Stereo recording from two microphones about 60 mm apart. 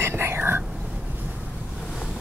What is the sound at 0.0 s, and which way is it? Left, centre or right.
Whispering, right.